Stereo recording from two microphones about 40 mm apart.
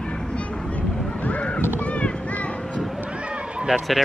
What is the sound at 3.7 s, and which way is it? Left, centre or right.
Speech, centre.